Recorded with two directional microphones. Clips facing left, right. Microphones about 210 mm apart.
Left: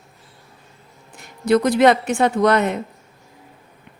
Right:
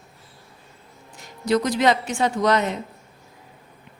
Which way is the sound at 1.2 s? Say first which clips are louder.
Left 5 dB; 55° left (ahead or behind).